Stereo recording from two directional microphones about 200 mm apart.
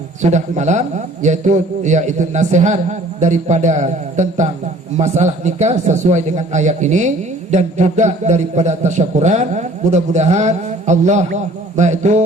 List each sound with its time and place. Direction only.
0.2 s a man's voice: 35° right (ahead or behind)